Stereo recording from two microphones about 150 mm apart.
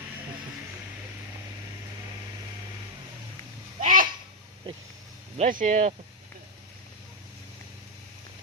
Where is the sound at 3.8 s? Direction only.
65° right (ahead or behind).